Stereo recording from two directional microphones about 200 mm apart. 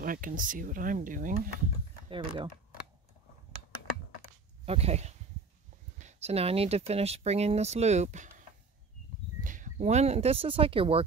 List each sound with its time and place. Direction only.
0.0 s speech: 45° right (ahead or behind)
2.0 s speech: 25° right (ahead or behind)
4.6 s speech: 30° right (ahead or behind)